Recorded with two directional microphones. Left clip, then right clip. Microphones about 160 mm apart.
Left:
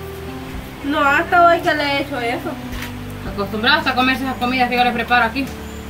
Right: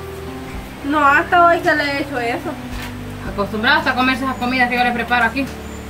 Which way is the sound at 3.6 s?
15° right (ahead or behind).